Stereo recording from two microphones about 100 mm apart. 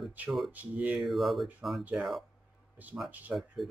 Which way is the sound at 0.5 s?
15° right (ahead or behind).